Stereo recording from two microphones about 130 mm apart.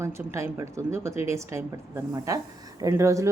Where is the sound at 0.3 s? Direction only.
20° right (ahead or behind).